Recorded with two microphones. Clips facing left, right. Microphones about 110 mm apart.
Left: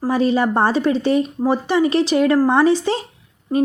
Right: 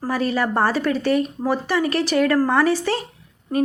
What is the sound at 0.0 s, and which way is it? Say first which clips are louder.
Speech: left 5 dB; 20° left (ahead or behind).